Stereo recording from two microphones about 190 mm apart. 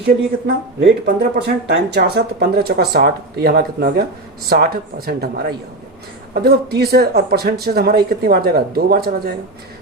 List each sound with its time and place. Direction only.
0.0 s speech: 60° right (ahead or behind)